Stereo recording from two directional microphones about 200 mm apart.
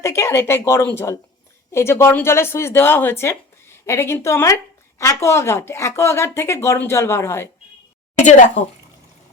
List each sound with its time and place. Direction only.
0.0 s a woman's voice: 15° left (ahead or behind)
8.2 s speech: 35° left (ahead or behind)